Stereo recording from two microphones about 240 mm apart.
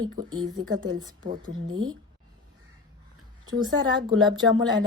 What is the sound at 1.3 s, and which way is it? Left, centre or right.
Speech, right.